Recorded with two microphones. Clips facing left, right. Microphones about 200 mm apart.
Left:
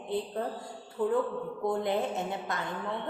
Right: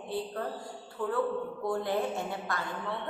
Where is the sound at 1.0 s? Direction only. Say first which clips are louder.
Left 2 dB; 20° left (ahead or behind).